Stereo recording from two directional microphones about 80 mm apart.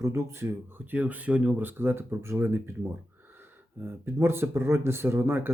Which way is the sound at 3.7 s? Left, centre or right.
Right.